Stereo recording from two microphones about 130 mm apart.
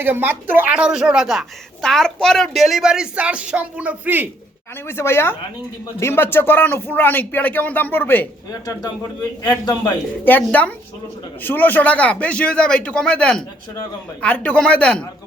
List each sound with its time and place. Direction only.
0.0 s a woman's voice: 15° right (ahead or behind)
4.9 s speech: 20° left (ahead or behind)
9.4 s a man's voice: 30° left (ahead or behind)
10.2 s speech: 15° left (ahead or behind)